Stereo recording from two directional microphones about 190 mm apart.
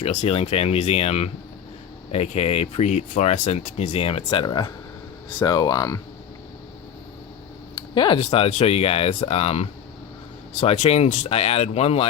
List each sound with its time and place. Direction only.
0.0 s speech: 35° left (ahead or behind)
7.8 s speech: 25° left (ahead or behind)